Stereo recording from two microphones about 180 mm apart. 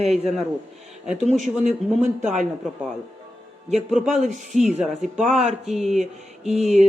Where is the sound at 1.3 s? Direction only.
40° right (ahead or behind).